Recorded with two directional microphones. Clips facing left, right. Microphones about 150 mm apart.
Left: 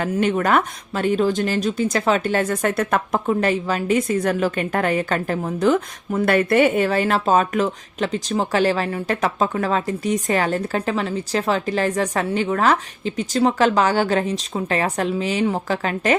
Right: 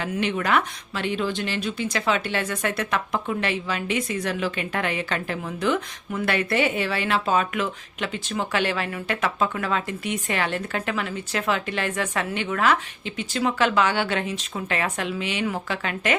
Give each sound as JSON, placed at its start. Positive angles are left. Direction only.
{"t": 0.0, "sound": "speech", "side_deg": 45}